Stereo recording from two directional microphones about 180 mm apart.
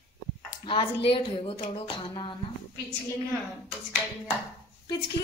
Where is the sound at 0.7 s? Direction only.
30° left (ahead or behind).